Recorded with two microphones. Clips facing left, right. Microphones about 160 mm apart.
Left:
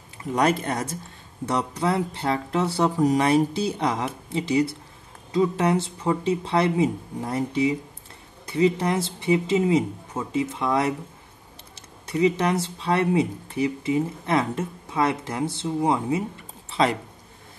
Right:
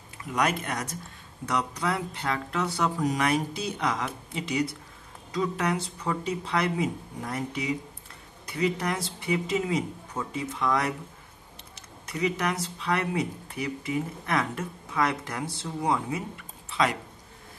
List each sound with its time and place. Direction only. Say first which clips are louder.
0.3 s speech: left 5 dB; 30° left (ahead or behind)
12.1 s speech: left 7 dB; 30° left (ahead or behind)